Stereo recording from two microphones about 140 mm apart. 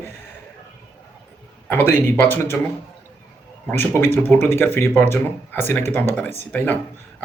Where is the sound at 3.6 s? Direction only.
15° left (ahead or behind).